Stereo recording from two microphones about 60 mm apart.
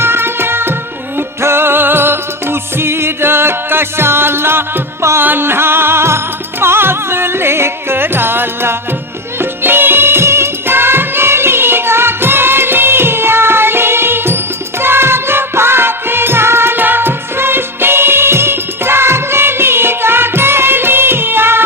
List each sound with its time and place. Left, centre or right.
0.0 s music: right